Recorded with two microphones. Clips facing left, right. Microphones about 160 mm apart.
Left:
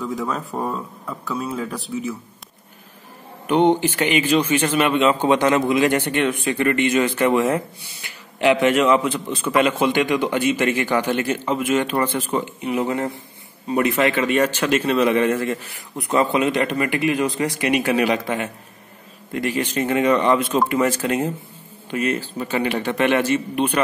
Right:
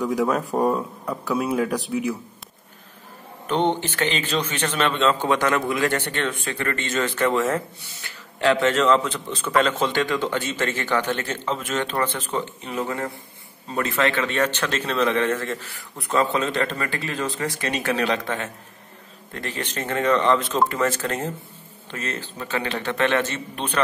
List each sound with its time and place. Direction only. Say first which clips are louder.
0.5 s speech: right 5 dB; 15° right (ahead or behind)
3.4 s a man's voice: left 6 dB; 10° left (ahead or behind)